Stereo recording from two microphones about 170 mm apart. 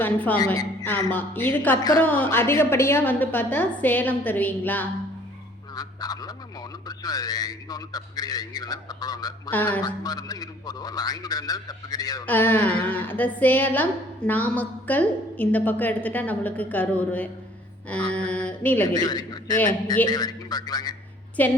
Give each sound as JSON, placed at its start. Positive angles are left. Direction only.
{"t": 0.0, "sound": "a woman's voice", "side_deg": 10}
{"t": 0.5, "sound": "speech", "side_deg": 20}
{"t": 1.1, "sound": "a woman's voice", "side_deg": 10}
{"t": 5.7, "sound": "honk", "side_deg": 20}
{"t": 6.8, "sound": "speech", "side_deg": 20}
{"t": 9.5, "sound": "a woman's voice", "side_deg": 10}
{"t": 9.8, "sound": "speech", "side_deg": 20}
{"t": 12.2, "sound": "a woman's voice", "side_deg": 10}
{"t": 17.8, "sound": "mantra", "side_deg": 5}
{"t": 18.9, "sound": "speech", "side_deg": 25}